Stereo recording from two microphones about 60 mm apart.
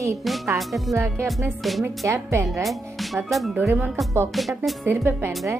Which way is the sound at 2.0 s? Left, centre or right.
Right.